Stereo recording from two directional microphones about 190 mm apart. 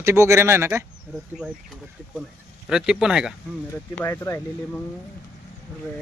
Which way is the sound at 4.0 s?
10° left (ahead or behind).